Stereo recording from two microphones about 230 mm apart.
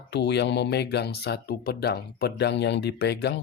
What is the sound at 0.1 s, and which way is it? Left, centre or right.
Speech, left.